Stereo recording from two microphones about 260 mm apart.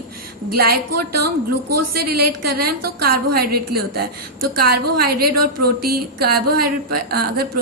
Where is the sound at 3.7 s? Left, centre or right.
Right.